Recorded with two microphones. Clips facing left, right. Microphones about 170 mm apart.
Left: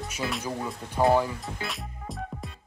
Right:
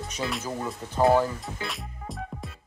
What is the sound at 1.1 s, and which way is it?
Music, centre (ahead or behind).